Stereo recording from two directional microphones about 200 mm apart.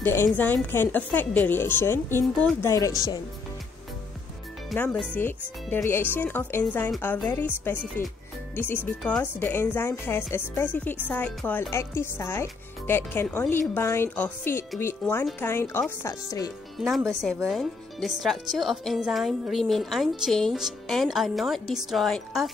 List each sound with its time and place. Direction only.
0.0 s speech: 10° left (ahead or behind)
4.6 s speech: 5° left (ahead or behind)
8.5 s speech: 10° left (ahead or behind)
16.7 s speech: centre (ahead or behind)